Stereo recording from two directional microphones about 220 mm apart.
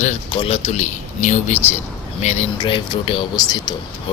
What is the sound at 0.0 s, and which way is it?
Speech, 30° left (ahead or behind).